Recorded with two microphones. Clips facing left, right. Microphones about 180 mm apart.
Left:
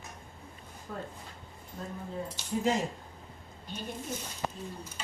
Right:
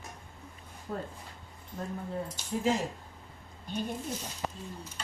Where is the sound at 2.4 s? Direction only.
50° right (ahead or behind).